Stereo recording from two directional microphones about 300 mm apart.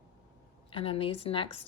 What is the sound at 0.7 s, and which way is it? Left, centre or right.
Speech, centre.